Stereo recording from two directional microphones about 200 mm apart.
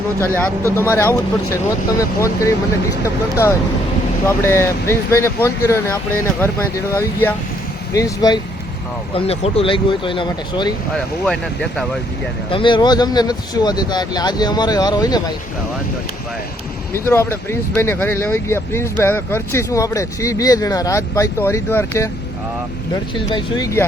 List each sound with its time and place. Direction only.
0.3 s speech: 10° left (ahead or behind)
9.1 s speech: 30° left (ahead or behind)
10.9 s speech: 5° left (ahead or behind)
12.5 s speech: 25° left (ahead or behind)
16.9 s speech: 15° left (ahead or behind)
23.1 s speech: 20° left (ahead or behind)